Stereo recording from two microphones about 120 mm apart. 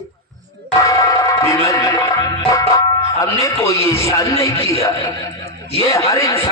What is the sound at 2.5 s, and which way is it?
A man's voice, 25° left (ahead or behind).